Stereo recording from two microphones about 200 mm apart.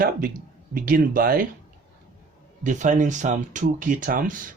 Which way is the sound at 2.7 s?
40° right (ahead or behind).